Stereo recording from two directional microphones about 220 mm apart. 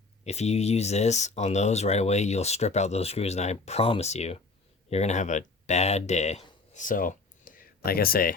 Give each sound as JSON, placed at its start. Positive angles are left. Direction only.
{"t": 0.3, "sound": "speech", "side_deg": 30}